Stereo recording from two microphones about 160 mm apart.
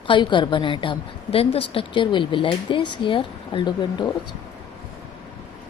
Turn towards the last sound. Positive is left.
turn(degrees=30)  # may be behind; listen again after turning